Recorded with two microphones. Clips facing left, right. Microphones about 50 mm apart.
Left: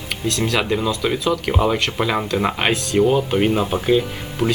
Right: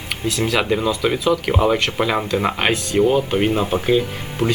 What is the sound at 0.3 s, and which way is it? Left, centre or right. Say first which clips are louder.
Speech: right 1 dB; centre.